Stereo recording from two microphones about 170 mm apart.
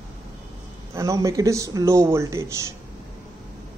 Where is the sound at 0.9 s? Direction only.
20° right (ahead or behind).